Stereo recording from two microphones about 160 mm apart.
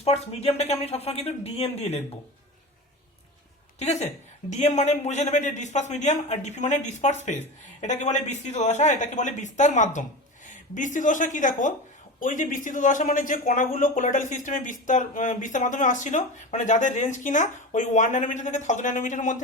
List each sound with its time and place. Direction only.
0.0 s speech: 40° left (ahead or behind)
3.8 s a man's voice: 45° left (ahead or behind)